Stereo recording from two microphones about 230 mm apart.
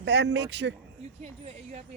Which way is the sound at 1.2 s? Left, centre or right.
Right.